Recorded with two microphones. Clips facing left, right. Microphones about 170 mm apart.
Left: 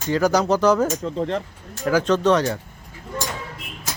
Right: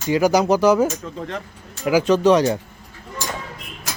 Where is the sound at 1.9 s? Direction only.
10° right (ahead or behind).